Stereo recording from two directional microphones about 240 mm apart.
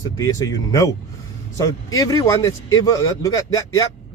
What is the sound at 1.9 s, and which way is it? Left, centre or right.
Speech, centre.